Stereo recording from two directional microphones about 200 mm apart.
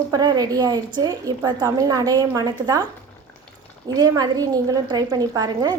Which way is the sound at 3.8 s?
20° right (ahead or behind).